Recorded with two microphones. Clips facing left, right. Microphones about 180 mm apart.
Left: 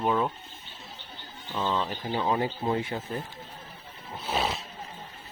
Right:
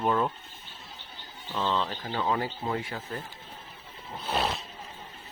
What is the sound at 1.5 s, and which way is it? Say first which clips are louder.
Speech: even; 10° left (ahead or behind).